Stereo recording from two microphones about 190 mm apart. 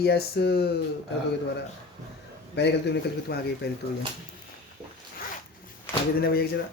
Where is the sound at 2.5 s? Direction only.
65° left (ahead or behind).